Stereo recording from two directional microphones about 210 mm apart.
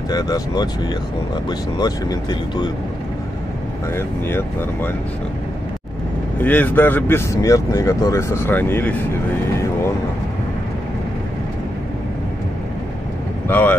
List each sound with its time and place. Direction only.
0.1 s speech: 20° left (ahead or behind)
3.9 s speech: 10° left (ahead or behind)
6.4 s speech: 5° left (ahead or behind)
13.5 s speech: 10° left (ahead or behind)